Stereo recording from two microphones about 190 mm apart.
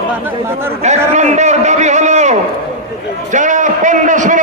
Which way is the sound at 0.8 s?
40° right (ahead or behind).